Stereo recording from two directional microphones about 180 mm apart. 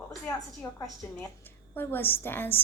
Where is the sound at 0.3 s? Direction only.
20° left (ahead or behind).